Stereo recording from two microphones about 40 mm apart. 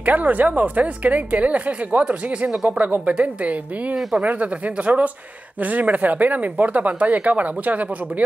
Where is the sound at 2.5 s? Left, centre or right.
Centre.